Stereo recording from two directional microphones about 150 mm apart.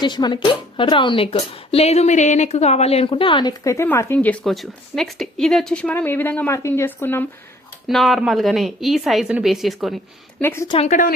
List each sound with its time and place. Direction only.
0.0 s speech: 30° left (ahead or behind); by 7.3 s 15° left (ahead or behind)
7.9 s speech: centre (ahead or behind)
10.4 s a woman's voice: 15° left (ahead or behind)
10.7 s a woman's voice: 40° left (ahead or behind)